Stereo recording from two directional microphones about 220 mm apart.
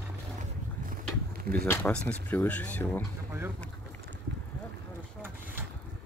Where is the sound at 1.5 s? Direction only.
5° left (ahead or behind).